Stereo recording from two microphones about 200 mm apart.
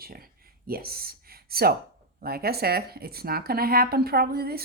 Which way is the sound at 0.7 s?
50° right (ahead or behind).